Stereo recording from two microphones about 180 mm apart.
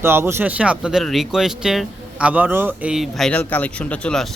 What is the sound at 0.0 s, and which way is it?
Speech, 15° right (ahead or behind).